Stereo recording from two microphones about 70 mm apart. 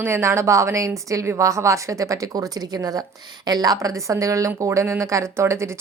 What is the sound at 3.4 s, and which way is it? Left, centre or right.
A woman's voice, right.